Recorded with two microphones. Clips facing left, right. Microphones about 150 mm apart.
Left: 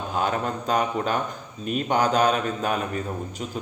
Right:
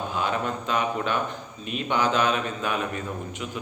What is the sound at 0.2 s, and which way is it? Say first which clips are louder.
A man's voice: left 3 dB; 40° left (ahead or behind).